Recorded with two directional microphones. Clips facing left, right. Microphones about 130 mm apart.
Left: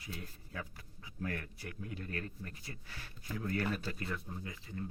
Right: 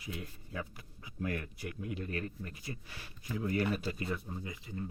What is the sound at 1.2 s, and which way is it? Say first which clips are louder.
Speech: right 3 dB; 20° right (ahead or behind).